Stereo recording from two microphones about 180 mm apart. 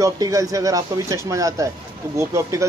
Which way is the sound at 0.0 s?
20° right (ahead or behind).